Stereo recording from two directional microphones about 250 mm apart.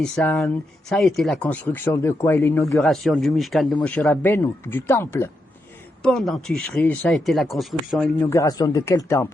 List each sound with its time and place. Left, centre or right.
0.0 s speech: centre
2.7 s speech: centre
8.3 s speech: centre